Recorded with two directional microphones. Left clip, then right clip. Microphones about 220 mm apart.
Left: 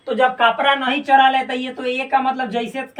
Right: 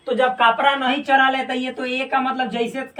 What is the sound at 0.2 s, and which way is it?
Speech, 15° right (ahead or behind).